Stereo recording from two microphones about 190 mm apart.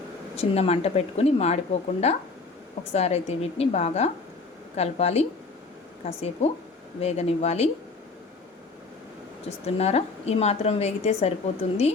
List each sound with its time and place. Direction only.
0.3 s speech: 35° left (ahead or behind)
9.6 s speech: 35° left (ahead or behind)